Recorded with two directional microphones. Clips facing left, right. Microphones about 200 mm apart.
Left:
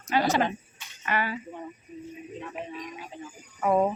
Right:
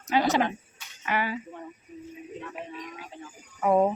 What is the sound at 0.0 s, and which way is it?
Speech, 15° right (ahead or behind).